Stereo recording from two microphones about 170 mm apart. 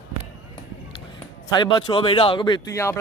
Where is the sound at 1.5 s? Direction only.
25° left (ahead or behind).